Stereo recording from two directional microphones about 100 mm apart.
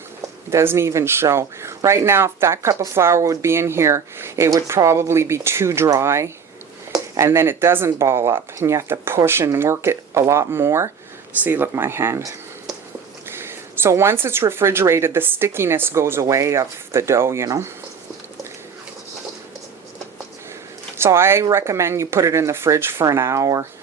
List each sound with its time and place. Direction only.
0.5 s speech: 25° right (ahead or behind)
21.0 s speech: 25° right (ahead or behind)